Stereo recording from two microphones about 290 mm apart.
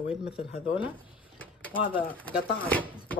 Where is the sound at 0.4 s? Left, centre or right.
Centre.